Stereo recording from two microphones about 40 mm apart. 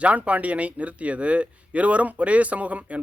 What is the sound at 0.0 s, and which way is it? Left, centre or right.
Speech, right.